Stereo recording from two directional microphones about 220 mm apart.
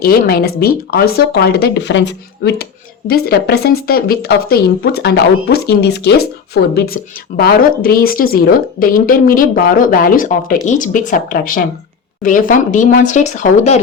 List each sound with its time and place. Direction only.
0.0 s speech: 45° left (ahead or behind)